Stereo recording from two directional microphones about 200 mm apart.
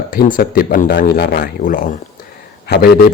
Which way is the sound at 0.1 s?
45° left (ahead or behind).